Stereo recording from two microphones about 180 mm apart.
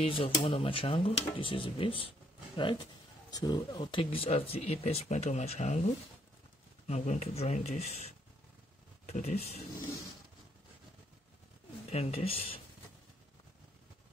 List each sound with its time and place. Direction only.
0.0 s speech: 30° left (ahead or behind)
6.9 s speech: 40° left (ahead or behind)
11.9 s speech: 35° left (ahead or behind)